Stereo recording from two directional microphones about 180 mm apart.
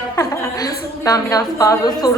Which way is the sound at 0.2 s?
20° left (ahead or behind).